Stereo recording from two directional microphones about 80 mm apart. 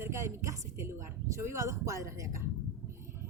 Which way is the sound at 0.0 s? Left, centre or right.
Right.